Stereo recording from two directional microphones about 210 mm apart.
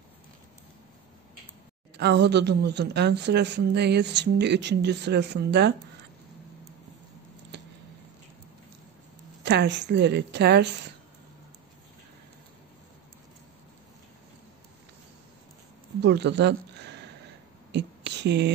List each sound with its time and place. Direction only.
2.0 s a woman's voice: 50° right (ahead or behind)
9.4 s a woman's voice: 55° right (ahead or behind)
16.0 s speech: 55° right (ahead or behind)
17.6 s a sound: 55° right (ahead or behind)